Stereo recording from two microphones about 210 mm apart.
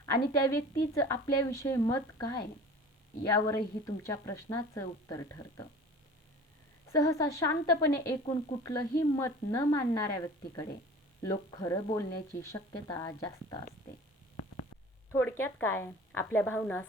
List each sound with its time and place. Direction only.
0.0 s a woman's voice: 15° left (ahead or behind)
6.8 s a woman's voice: 15° left (ahead or behind)
15.1 s a woman's voice: 10° left (ahead or behind)